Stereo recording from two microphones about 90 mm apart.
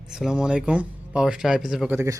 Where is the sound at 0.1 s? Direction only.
5° right (ahead or behind).